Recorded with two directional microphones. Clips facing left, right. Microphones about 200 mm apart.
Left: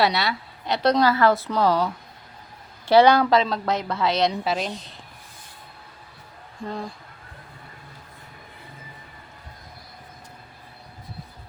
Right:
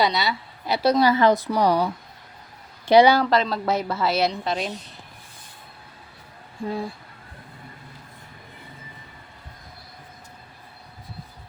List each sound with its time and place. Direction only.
0.0 s a woman's voice: centre (ahead or behind)
1.1 s a woman's voice: 15° right (ahead or behind)
3.2 s a woman's voice: centre (ahead or behind)
6.7 s a woman's voice: 5° right (ahead or behind)